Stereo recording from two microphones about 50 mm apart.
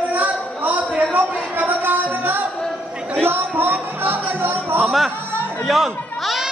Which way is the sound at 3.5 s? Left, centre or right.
Right.